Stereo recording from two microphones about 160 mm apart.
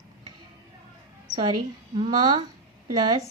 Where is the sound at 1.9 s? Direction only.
30° right (ahead or behind).